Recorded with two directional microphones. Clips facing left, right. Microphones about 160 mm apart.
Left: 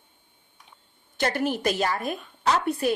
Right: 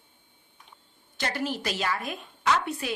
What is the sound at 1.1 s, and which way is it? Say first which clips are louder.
A woman's voice: left 5 dB; 50° left (ahead or behind).